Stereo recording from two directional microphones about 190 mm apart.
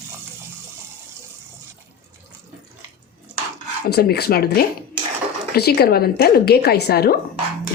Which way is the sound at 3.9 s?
55° left (ahead or behind).